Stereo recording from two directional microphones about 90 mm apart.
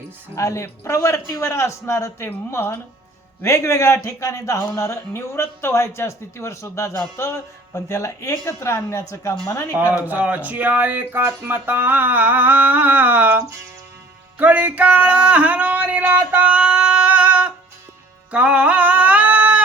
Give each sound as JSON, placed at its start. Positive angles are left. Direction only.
{"t": 0.3, "sound": "speech", "side_deg": 35}
{"t": 9.9, "sound": "speech", "side_deg": -15}
{"t": 14.3, "sound": "a sound", "side_deg": -20}
{"t": 18.3, "sound": "music", "side_deg": -15}